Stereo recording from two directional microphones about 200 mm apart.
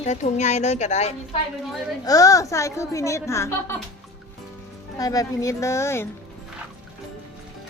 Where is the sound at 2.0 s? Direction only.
15° left (ahead or behind).